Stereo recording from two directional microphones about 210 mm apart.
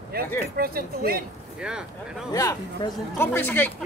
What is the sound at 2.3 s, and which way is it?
Speech, 15° left (ahead or behind).